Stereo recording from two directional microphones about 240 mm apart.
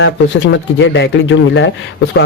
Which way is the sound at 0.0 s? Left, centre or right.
Left.